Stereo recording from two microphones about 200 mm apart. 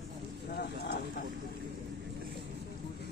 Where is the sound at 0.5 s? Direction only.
55° left (ahead or behind).